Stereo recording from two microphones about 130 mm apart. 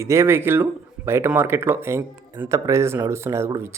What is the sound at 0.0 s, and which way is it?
Speech, 20° right (ahead or behind).